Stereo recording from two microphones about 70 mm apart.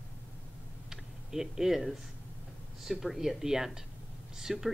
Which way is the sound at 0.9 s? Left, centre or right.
Centre.